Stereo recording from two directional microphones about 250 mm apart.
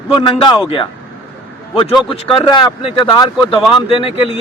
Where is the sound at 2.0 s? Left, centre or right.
Left.